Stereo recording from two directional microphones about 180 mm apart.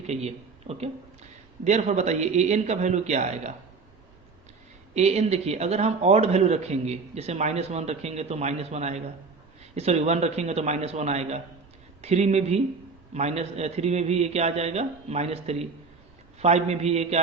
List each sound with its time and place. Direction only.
0.1 s a man's voice: 35° right (ahead or behind)
4.9 s a man's voice: 40° right (ahead or behind)